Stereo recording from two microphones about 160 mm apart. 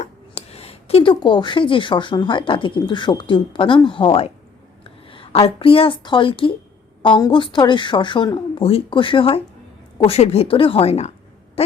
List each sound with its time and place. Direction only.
0.0 s a woman's voice: 40° left (ahead or behind)